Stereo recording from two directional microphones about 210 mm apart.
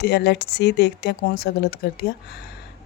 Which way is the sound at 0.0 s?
50° left (ahead or behind).